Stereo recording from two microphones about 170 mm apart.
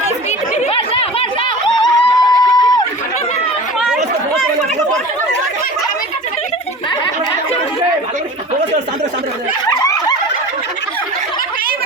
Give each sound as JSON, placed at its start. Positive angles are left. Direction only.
{"t": 0.3, "sound": "a sound", "side_deg": 40}
{"t": 3.8, "sound": "chatter", "side_deg": -5}
{"t": 9.6, "sound": "snicker", "side_deg": 20}